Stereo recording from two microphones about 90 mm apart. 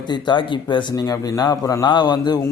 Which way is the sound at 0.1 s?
60° left (ahead or behind).